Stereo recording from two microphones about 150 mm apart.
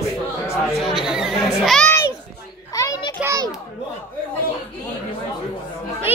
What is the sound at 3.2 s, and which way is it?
Children playing, 20° right (ahead or behind).